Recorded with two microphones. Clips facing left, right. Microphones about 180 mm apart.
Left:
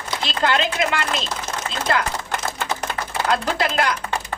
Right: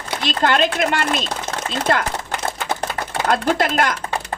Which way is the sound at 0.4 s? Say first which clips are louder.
Right 3 dB; 45° right (ahead or behind).